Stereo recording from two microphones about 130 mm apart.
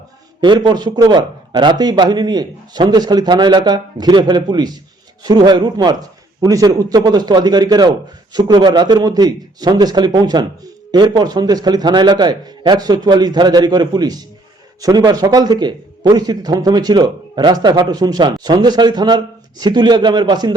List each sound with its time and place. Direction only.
0.4 s a man's voice: 35° right (ahead or behind)